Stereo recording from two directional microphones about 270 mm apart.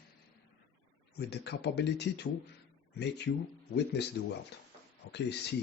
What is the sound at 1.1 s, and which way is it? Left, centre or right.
Speech, left.